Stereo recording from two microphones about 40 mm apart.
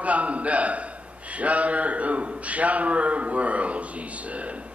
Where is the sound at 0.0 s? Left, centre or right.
Right.